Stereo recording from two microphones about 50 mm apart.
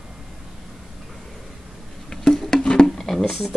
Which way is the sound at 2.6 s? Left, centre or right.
Centre.